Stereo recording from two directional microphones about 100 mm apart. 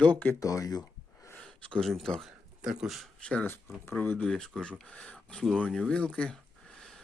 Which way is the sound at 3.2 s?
10° left (ahead or behind).